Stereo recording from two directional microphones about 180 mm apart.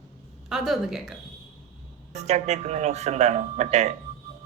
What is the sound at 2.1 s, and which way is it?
A man's voice, 40° right (ahead or behind).